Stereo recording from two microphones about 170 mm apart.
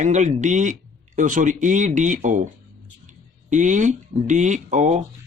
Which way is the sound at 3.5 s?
45° right (ahead or behind).